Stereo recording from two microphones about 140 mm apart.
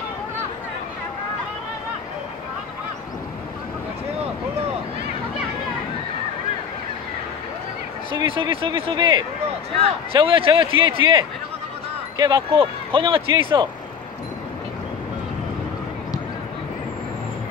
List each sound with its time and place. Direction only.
8.1 s speech: 35° right (ahead or behind)